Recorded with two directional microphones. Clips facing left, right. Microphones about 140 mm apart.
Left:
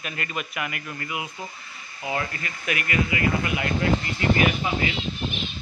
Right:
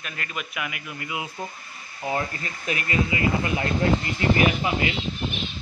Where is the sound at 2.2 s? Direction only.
30° right (ahead or behind).